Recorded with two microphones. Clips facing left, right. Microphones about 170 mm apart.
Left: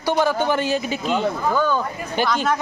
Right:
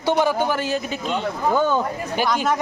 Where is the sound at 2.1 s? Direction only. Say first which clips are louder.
Left 1 dB; 10° right (ahead or behind).